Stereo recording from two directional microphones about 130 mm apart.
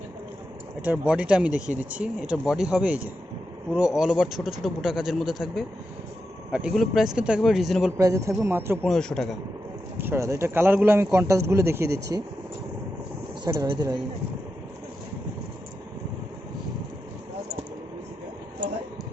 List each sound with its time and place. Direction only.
0.8 s speech: 10° right (ahead or behind)
7.9 s speech: 25° right (ahead or behind)
8.8 s speech: 5° left (ahead or behind)
10.0 s speech: 20° right (ahead or behind)
13.4 s speech: 30° right (ahead or behind)